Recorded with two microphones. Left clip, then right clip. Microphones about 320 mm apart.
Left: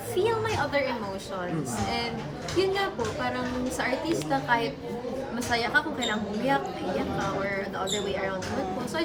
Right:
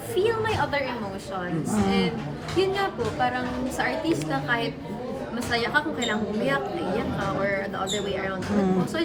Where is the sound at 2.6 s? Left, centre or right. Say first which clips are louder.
Right 2 dB; centre.